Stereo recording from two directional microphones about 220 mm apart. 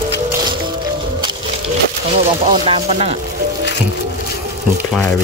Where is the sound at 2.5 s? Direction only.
25° right (ahead or behind).